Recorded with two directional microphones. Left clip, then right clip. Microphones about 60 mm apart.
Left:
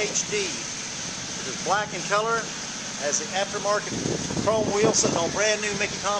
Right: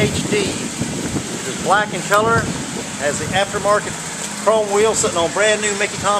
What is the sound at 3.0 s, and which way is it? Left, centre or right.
Speech, left.